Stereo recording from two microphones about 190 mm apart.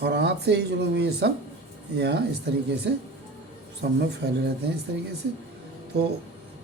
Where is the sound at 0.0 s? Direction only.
60° right (ahead or behind).